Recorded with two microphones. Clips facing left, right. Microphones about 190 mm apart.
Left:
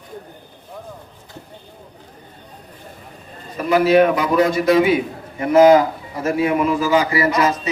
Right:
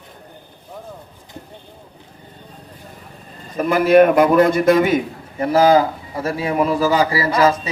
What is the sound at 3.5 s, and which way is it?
A man's voice, 50° right (ahead or behind).